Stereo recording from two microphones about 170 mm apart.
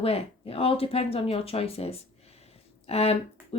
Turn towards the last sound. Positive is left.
turn(degrees=35)  # may be behind; listen again after turning